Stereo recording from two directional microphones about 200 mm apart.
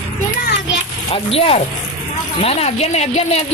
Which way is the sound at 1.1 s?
30° left (ahead or behind).